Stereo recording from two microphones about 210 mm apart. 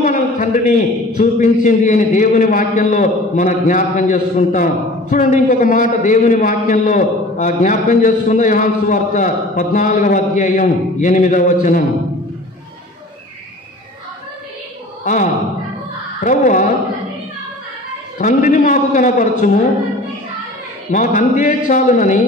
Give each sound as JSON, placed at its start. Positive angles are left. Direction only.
{"t": 0.0, "sound": "a man's voice", "side_deg": 40}
{"t": 15.0, "sound": "a man's voice", "side_deg": 35}
{"t": 18.1, "sound": "a man's voice", "side_deg": 35}
{"t": 20.9, "sound": "a man's voice", "side_deg": 40}